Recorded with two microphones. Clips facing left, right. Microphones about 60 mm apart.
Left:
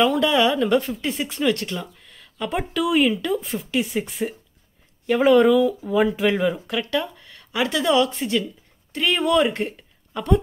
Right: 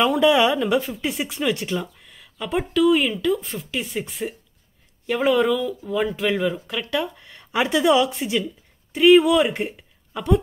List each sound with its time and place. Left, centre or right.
0.0 s speech: centre
0.6 s speech: centre
7.2 s a woman's voice: right; by 10.4 s centre